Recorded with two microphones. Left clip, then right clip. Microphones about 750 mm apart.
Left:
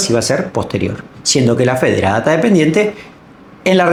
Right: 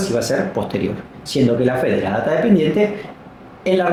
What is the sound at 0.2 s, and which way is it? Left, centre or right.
Speech, left.